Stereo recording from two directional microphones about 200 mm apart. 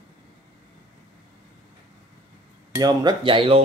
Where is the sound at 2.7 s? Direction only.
20° right (ahead or behind).